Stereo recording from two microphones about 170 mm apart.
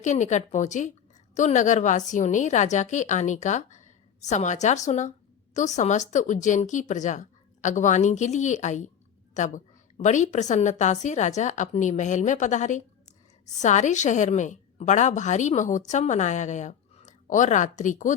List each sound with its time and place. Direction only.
0.0 s a woman's voice: 45° left (ahead or behind)